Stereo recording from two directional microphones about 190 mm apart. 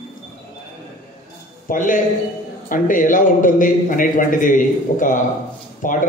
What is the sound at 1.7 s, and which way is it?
A man's voice, 45° left (ahead or behind).